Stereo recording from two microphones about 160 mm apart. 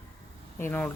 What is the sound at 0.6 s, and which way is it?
Speech, 10° left (ahead or behind).